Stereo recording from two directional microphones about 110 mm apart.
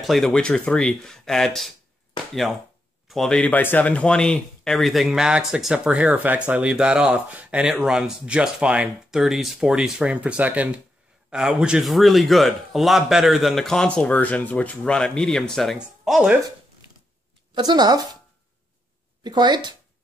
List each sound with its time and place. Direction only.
0.0 s speech: centre (ahead or behind)
3.1 s speech: 5° left (ahead or behind)
17.6 s speech: 40° right (ahead or behind)
19.2 s speech: 40° right (ahead or behind)